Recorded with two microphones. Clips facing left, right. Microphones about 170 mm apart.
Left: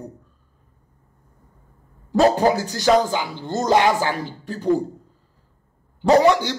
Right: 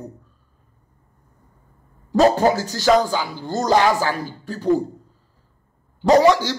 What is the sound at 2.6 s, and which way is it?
Speech, 20° left (ahead or behind).